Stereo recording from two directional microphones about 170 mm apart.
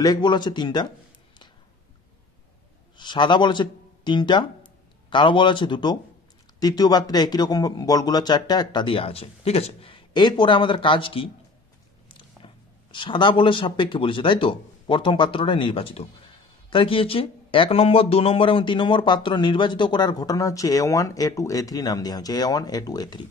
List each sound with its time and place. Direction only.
0.0 s speech: 25° left (ahead or behind)
3.0 s speech: 25° left (ahead or behind)
12.4 s a sound: 30° left (ahead or behind)
12.9 s speech: 30° left (ahead or behind)